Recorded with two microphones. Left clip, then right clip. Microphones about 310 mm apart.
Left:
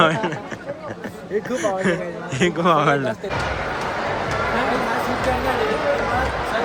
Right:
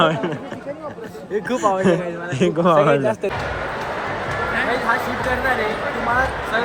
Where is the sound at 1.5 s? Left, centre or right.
Centre.